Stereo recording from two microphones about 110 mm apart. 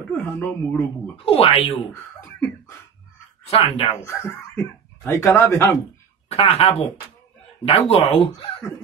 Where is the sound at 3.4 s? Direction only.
65° left (ahead or behind).